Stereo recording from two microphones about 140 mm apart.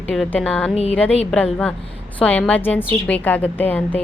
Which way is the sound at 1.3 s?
5° left (ahead or behind).